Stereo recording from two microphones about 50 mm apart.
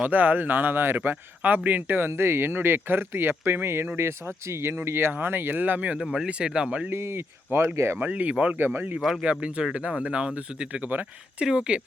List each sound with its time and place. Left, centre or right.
0.0 s speech: right
1.4 s speech: right
6.0 s speech: centre
6.9 s speech: right
7.9 s speech: right
8.5 s speech: right
9.2 s speech: right
10.7 s speech: right
11.3 s speech: centre